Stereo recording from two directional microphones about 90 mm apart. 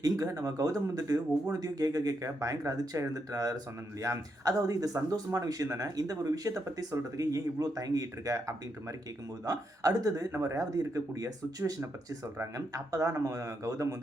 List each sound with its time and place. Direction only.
0.0 s speech: 40° right (ahead or behind)